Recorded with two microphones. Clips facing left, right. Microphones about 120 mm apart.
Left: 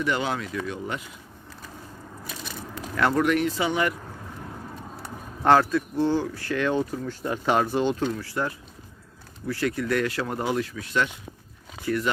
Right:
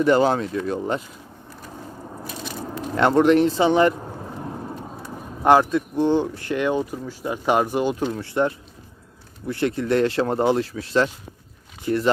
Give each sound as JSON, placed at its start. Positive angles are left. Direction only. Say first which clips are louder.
{"t": 0.0, "sound": "speech", "louder": "right 9 dB", "side_deg": -40}
{"t": 2.7, "sound": "a sound", "louder": "right 5 dB", "side_deg": -30}
{"t": 5.4, "sound": "speech", "louder": "right 3 dB", "side_deg": -15}
{"t": 8.1, "sound": "speech", "louder": "right 6 dB", "side_deg": -25}